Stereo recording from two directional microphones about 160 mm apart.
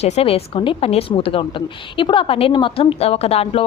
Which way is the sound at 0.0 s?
40° left (ahead or behind).